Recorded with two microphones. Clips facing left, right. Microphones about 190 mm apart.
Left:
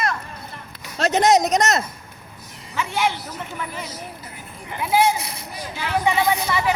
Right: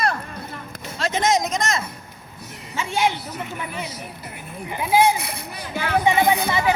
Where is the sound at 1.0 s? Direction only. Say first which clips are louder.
Left 4 dB; 70° left (ahead or behind).